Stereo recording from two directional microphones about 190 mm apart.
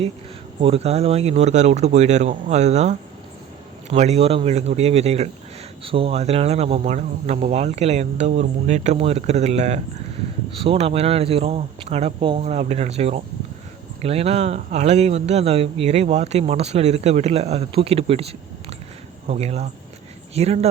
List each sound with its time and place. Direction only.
0.6 s speech: 30° right (ahead or behind)